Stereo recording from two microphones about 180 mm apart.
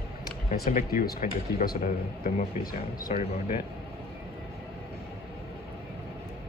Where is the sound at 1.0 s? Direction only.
55° left (ahead or behind).